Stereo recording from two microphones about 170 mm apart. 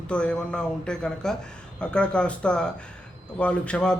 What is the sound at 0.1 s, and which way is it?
A man's voice, 5° left (ahead or behind).